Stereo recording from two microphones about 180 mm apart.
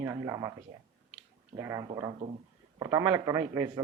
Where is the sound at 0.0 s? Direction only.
15° right (ahead or behind).